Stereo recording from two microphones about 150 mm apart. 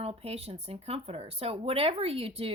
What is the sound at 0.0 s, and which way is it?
Speech, 40° right (ahead or behind).